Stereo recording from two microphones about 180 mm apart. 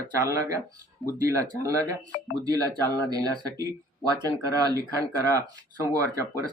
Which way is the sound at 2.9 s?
20° right (ahead or behind).